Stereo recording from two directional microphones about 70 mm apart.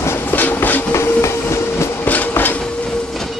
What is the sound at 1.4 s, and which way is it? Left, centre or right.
Train, left.